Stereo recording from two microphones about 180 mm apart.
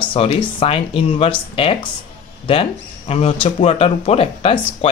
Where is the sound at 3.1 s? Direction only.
35° left (ahead or behind).